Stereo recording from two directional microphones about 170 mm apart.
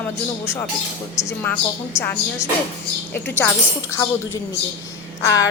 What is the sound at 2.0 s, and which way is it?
Speech, 15° left (ahead or behind).